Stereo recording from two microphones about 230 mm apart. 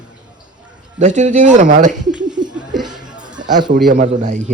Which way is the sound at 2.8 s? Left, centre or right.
Centre.